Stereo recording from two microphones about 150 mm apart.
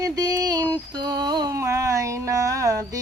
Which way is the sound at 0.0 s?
25° right (ahead or behind).